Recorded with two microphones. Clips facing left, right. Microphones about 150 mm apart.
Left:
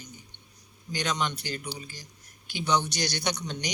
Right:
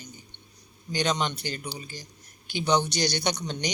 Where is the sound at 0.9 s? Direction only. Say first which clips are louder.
Right 3 dB; 25° right (ahead or behind).